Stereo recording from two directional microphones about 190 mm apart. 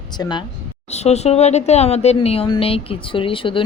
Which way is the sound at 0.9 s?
35° left (ahead or behind).